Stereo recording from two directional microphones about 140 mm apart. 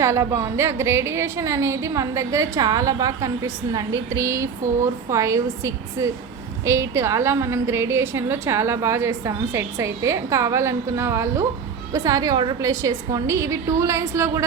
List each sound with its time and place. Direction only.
0.0 s a woman's voice: 20° right (ahead or behind)